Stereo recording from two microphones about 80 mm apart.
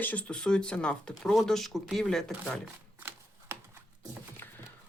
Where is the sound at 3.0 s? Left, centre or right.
Right.